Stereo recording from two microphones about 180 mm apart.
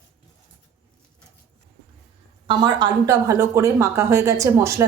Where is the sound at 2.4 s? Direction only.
25° right (ahead or behind).